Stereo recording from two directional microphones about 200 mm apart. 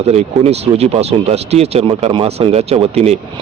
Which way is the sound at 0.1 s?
30° right (ahead or behind).